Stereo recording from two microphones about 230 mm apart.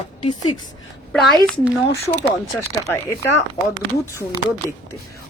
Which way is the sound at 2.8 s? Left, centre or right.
Centre.